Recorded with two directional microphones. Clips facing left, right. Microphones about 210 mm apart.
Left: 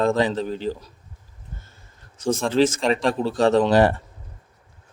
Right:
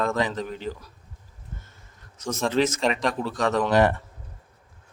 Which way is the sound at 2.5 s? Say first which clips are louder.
Left 3 dB; 30° left (ahead or behind).